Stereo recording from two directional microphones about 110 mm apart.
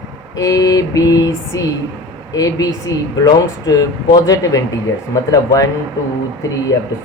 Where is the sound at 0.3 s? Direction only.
30° left (ahead or behind).